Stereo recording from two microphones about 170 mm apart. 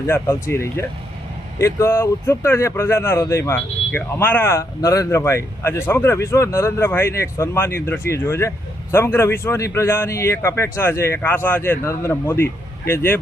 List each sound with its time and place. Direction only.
0.1 s speech: 15° left (ahead or behind)